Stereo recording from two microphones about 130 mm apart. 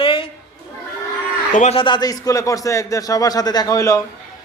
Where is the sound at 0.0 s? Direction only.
40° left (ahead or behind).